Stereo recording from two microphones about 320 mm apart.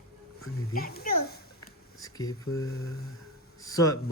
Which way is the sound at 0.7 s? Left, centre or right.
Left.